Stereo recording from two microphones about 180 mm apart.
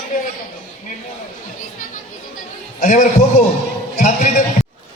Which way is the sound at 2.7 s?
45° left (ahead or behind).